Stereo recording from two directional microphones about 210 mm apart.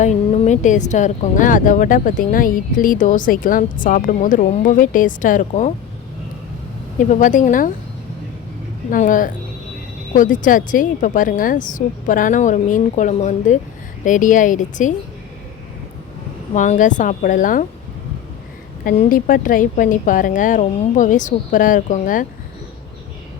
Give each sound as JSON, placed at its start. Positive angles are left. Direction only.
{"t": 0.0, "sound": "speech", "side_deg": 30}
{"t": 7.1, "sound": "speech", "side_deg": 35}
{"t": 8.9, "sound": "speech", "side_deg": 40}
{"t": 16.6, "sound": "speech", "side_deg": 35}
{"t": 18.9, "sound": "speech", "side_deg": 40}